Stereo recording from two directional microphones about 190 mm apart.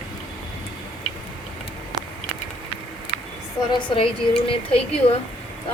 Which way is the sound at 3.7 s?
25° left (ahead or behind).